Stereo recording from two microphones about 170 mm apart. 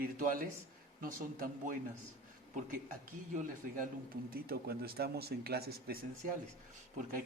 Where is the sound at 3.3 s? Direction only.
50° right (ahead or behind).